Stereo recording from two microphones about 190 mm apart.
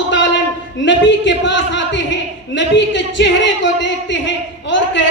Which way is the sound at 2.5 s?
70° left (ahead or behind).